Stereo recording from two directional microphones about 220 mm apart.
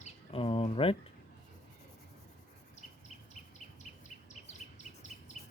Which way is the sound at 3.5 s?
30° left (ahead or behind).